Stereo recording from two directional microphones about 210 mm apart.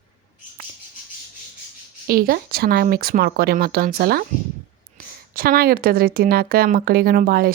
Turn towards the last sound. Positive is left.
turn(degrees=-45)  # may be behind; listen again after turning